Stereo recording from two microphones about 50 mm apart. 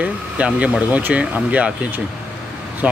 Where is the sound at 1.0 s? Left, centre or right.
Right.